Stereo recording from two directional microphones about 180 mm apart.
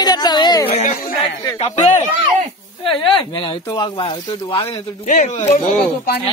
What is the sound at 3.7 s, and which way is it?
Speech, 25° left (ahead or behind).